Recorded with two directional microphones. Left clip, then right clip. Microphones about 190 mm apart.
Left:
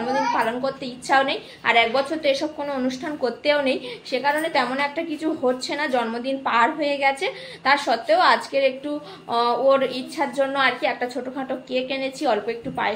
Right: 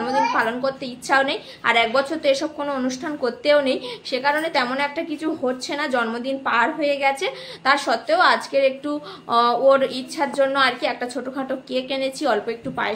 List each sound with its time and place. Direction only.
0.0 s a woman's voice: 10° right (ahead or behind)
10.6 s a woman's voice: 15° right (ahead or behind)